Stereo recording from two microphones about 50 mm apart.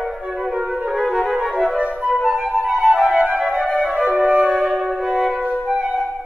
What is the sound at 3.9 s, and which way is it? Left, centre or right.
Flute, right.